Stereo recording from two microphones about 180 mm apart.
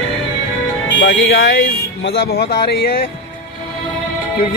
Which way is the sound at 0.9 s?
80° left.